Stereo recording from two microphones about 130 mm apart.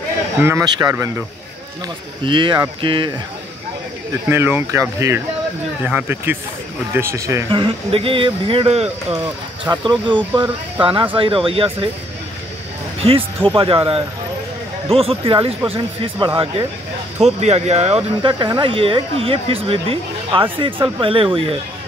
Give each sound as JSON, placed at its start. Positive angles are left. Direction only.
{"t": 0.4, "sound": "speech", "side_deg": -20}
{"t": 2.2, "sound": "speech", "side_deg": -40}
{"t": 4.3, "sound": "speech", "side_deg": -20}
{"t": 5.9, "sound": "speech", "side_deg": -10}
{"t": 7.5, "sound": "speech", "side_deg": -45}
{"t": 9.8, "sound": "speech", "side_deg": -40}
{"t": 13.0, "sound": "speech", "side_deg": -45}